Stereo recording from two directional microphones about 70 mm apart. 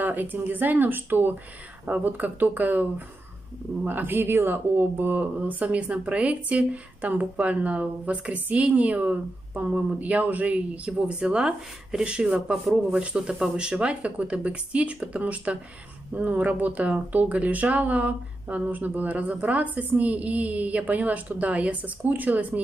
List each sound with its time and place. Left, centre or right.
0.0 s speech: right